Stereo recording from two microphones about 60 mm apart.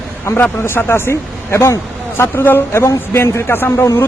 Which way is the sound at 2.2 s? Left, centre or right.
Left.